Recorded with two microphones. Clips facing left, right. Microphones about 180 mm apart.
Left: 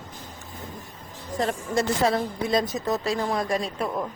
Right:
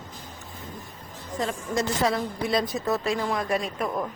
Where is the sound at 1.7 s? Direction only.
30° left (ahead or behind).